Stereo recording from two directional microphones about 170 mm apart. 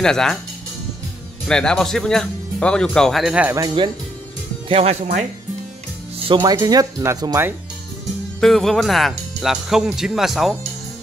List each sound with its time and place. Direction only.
0.0 s speech: 5° left (ahead or behind)
1.5 s speech: 5° left (ahead or behind)
3.5 s speech: 25° right (ahead or behind)
4.6 s speech: 35° right (ahead or behind)
6.2 s speech: 25° right (ahead or behind)
8.4 s speech: centre (ahead or behind)